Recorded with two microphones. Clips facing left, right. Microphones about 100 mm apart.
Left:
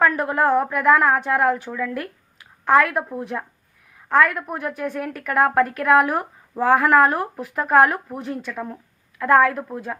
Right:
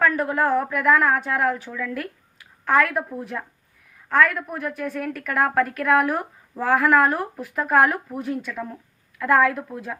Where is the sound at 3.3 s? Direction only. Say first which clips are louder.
Left 3 dB; 20° left (ahead or behind); by 10.0 s centre (ahead or behind).